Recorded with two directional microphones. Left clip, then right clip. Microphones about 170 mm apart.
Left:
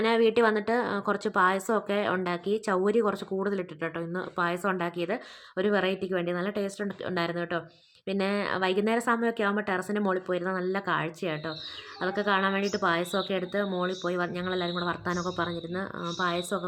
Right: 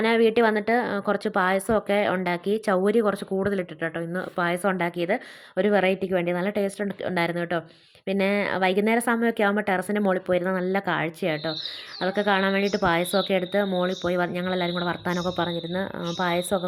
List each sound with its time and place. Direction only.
0.0 s a woman's voice: 20° right (ahead or behind)